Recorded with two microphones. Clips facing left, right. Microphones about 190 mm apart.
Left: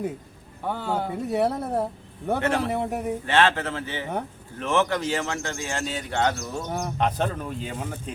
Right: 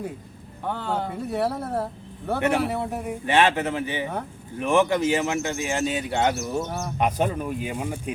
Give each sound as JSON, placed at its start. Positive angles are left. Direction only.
{"t": 0.6, "sound": "speech", "side_deg": 10}
{"t": 3.2, "sound": "speech", "side_deg": -15}
{"t": 6.6, "sound": "speech", "side_deg": 15}
{"t": 7.0, "sound": "speech", "side_deg": -10}